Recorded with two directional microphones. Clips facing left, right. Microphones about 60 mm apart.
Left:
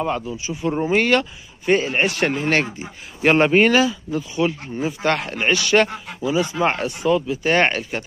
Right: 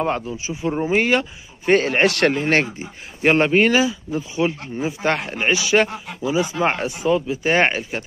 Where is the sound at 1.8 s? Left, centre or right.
Right.